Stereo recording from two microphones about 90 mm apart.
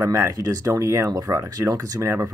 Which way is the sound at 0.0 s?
35° right (ahead or behind).